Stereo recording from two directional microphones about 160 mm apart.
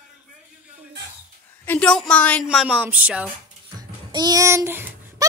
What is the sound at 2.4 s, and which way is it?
Speech, 5° right (ahead or behind).